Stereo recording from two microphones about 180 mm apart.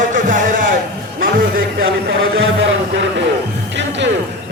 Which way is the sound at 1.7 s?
75° right (ahead or behind).